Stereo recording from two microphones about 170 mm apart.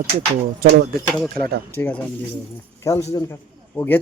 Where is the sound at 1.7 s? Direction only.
10° left (ahead or behind).